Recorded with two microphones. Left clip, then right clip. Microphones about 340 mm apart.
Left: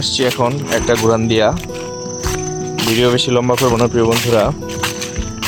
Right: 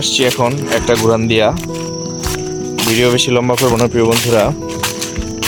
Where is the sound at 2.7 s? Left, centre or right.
Centre.